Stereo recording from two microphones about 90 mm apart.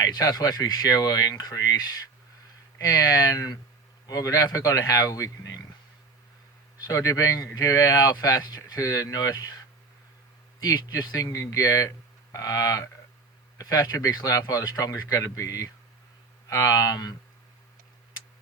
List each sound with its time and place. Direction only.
0.0 s a man's voice: 45° left (ahead or behind)
6.7 s speech: 40° left (ahead or behind)
10.6 s speech: 45° left (ahead or behind)